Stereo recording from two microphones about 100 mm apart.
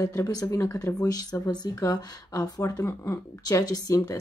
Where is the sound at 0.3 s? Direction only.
40° left (ahead or behind).